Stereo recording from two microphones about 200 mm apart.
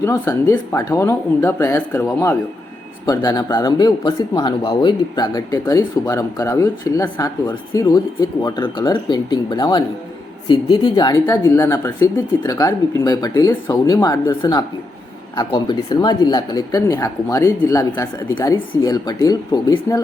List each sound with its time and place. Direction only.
0.0 s speech: 15° left (ahead or behind)